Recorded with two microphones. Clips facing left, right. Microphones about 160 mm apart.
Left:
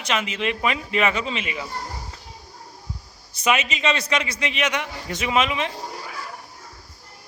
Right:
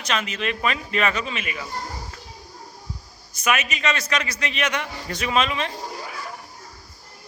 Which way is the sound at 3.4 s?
25° left (ahead or behind).